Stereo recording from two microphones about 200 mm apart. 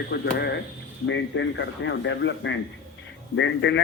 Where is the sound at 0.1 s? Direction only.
55° left (ahead or behind).